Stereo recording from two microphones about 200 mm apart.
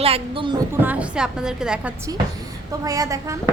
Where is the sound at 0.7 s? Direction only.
10° right (ahead or behind).